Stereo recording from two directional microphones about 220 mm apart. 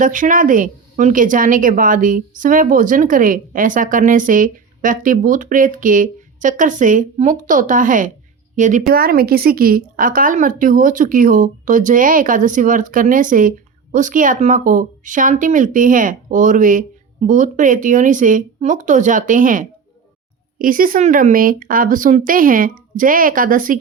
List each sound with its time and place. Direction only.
0.0 s speech: 35° right (ahead or behind)